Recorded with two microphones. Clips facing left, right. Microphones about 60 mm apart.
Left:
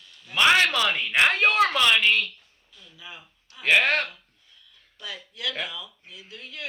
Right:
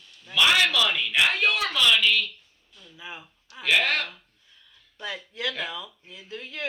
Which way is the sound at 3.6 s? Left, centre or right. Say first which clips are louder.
Left 3 dB; left.